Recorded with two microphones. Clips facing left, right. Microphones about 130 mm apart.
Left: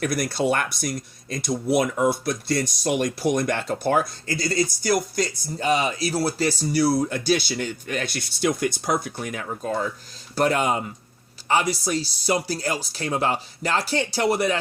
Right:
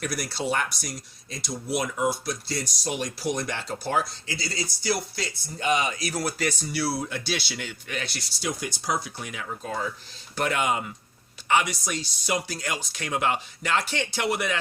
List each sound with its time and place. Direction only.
0.0 s speech: 50° left (ahead or behind); by 14.6 s 35° left (ahead or behind)